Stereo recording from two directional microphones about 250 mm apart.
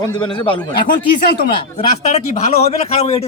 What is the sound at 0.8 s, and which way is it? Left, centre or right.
Speech, left.